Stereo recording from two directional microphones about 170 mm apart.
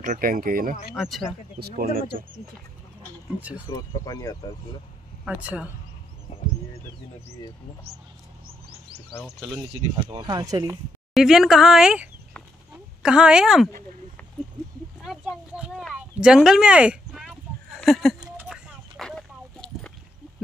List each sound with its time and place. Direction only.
0.0 s speech: 50° right (ahead or behind)
0.9 s a woman's voice: centre (ahead or behind)
1.6 s speech: 60° right (ahead or behind)
3.5 s speech: 20° left (ahead or behind)
5.2 s speech: 5° right (ahead or behind)
9.9 s speech: 25° right (ahead or behind)
11.1 s a woman's voice: centre (ahead or behind)
15.0 s a sound: 5° right (ahead or behind)